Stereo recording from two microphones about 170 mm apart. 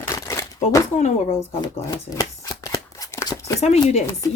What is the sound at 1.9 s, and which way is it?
Shuffling cards, 20° left (ahead or behind).